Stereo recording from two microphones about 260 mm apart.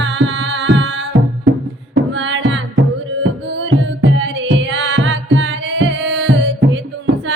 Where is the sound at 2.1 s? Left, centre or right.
Right.